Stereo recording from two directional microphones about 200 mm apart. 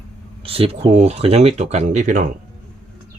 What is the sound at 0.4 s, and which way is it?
Speech, 30° right (ahead or behind).